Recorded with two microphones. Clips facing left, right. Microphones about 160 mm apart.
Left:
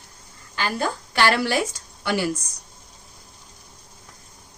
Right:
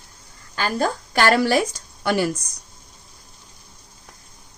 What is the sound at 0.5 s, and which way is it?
Speech, 45° right (ahead or behind).